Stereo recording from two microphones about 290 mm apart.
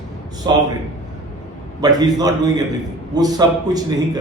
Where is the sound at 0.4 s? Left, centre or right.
Centre.